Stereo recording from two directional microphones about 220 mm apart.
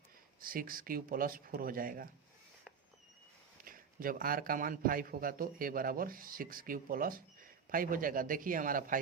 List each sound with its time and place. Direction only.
0.4 s a man's voice: 40° right (ahead or behind)
3.6 s a man's voice: 40° right (ahead or behind)